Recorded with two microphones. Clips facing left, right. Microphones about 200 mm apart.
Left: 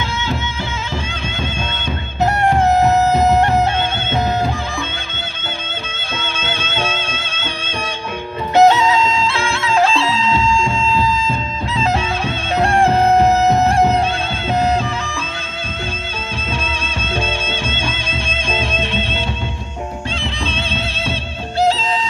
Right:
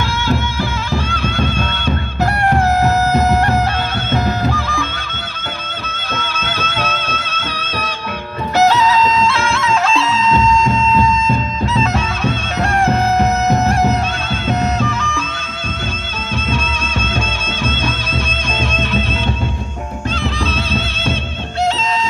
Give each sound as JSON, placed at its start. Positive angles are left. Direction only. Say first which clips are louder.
{"t": 2.4, "sound": "music", "louder": "left 1 dB", "side_deg": 25}
{"t": 5.9, "sound": "music", "louder": "right 2 dB", "side_deg": 25}
{"t": 18.5, "sound": "music", "louder": "right 1 dB", "side_deg": 30}